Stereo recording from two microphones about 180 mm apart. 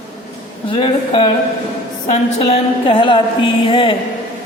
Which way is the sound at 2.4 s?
30° left (ahead or behind).